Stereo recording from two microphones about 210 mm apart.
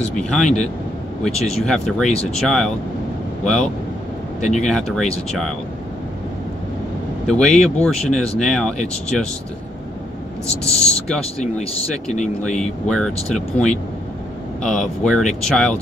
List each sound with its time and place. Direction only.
0.2 s speech: 5° left (ahead or behind)
2.0 s speech: 30° left (ahead or behind)
2.4 s speech: centre (ahead or behind)
4.4 s speech: 35° left (ahead or behind)
4.6 s speech: centre (ahead or behind)
7.2 s speech: 5° left (ahead or behind)
12.8 s speech: 5° left (ahead or behind)